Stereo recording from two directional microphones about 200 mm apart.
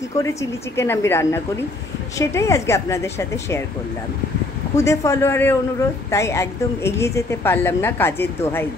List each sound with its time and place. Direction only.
0.2 s a woman's voice: 15° left (ahead or behind)
4.7 s a woman's voice: 15° left (ahead or behind)